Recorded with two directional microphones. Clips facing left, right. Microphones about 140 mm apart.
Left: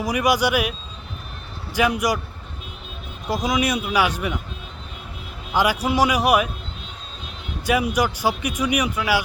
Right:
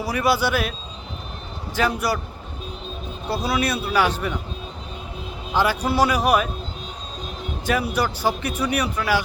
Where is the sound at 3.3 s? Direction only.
15° left (ahead or behind).